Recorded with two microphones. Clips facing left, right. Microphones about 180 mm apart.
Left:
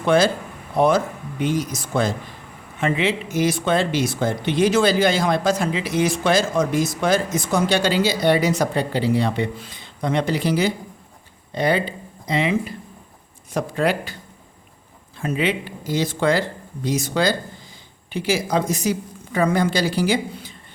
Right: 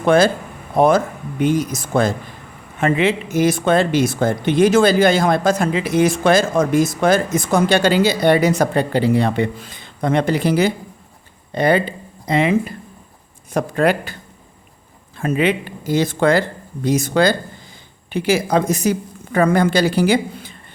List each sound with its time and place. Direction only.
0.0 s speech: 50° right (ahead or behind)
15.2 s speech: 55° right (ahead or behind)